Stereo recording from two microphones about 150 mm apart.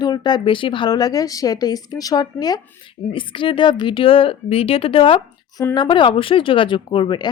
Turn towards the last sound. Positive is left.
turn(degrees=35)  # may be behind; listen again after turning